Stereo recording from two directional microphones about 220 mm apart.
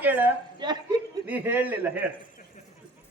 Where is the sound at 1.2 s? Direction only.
10° right (ahead or behind).